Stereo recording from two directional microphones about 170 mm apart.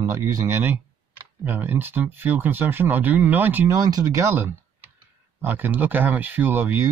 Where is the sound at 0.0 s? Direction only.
20° right (ahead or behind).